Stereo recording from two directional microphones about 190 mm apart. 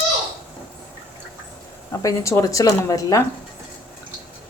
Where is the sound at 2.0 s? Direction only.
15° left (ahead or behind).